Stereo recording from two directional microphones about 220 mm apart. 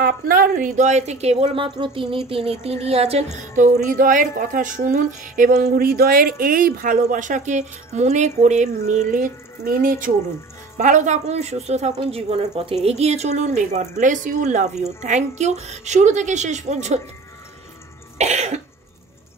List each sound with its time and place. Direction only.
0.0 s a woman's voice: 40° right (ahead or behind)
18.1 s cough: 30° right (ahead or behind)